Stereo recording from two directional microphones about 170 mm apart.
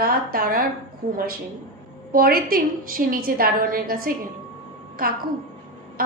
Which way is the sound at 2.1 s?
60° right (ahead or behind).